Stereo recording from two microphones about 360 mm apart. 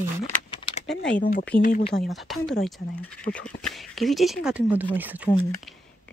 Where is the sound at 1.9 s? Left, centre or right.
Centre.